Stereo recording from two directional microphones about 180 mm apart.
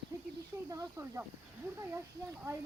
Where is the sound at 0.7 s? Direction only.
20° right (ahead or behind).